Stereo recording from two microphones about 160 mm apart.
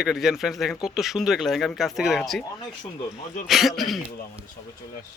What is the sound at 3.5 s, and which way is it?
Speech, centre (ahead or behind).